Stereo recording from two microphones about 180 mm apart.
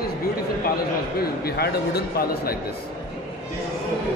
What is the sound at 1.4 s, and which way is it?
Speech, 60° left (ahead or behind).